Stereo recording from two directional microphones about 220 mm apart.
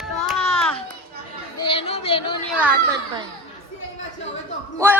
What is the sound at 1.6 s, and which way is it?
Speech, 25° left (ahead or behind).